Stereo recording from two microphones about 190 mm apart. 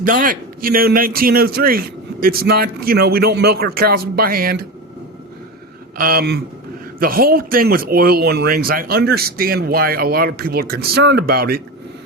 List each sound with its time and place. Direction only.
0.0 s a man's voice: 45° right (ahead or behind)
6.0 s a man's voice: 50° right (ahead or behind)